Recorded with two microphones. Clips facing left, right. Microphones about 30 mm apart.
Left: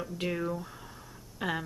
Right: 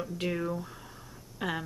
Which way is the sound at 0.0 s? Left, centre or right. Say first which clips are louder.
Right 1 dB; centre.